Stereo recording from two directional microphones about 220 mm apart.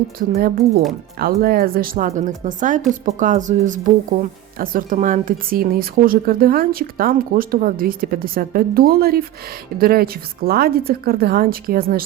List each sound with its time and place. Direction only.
0.2 s a woman's voice: 40° right (ahead or behind)